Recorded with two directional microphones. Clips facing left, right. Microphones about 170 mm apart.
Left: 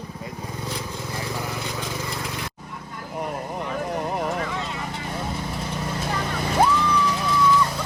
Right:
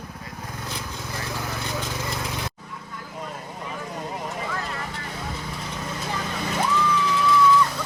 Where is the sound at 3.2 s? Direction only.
65° left (ahead or behind).